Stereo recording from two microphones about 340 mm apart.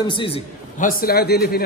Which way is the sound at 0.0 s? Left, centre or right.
Centre.